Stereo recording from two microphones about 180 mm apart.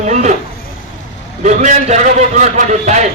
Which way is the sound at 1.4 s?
40° right (ahead or behind).